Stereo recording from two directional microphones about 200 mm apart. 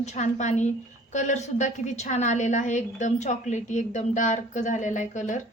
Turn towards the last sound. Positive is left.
turn(degrees=40)  # may be behind; listen again after turning